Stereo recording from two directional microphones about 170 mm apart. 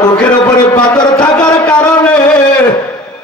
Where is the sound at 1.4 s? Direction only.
25° left (ahead or behind).